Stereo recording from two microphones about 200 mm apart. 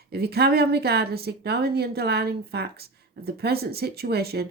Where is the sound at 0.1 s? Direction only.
50° right (ahead or behind).